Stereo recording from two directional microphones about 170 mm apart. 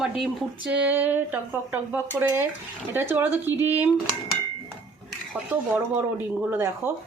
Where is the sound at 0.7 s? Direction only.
10° right (ahead or behind).